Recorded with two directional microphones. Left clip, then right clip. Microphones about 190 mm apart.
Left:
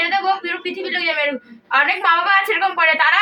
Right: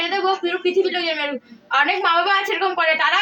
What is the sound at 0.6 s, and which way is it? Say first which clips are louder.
Speech: right 4 dB; 5° right (ahead or behind).